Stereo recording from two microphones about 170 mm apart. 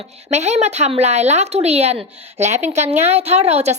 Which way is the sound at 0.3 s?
40° right (ahead or behind).